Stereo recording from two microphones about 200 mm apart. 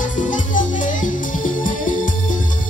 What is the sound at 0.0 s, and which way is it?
Music, 40° left (ahead or behind).